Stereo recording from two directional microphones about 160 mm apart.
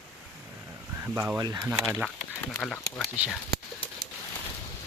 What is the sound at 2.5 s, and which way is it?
Speech, 5° left (ahead or behind).